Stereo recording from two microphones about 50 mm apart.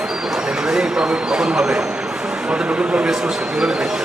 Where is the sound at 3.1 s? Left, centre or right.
Centre.